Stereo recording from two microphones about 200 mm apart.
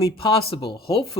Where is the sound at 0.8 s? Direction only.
25° left (ahead or behind).